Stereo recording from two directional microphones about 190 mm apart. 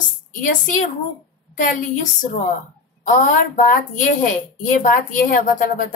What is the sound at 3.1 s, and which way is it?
A woman's voice, 45° left (ahead or behind).